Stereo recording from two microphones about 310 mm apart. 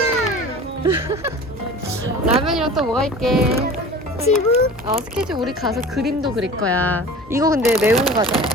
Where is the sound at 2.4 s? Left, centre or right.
Centre.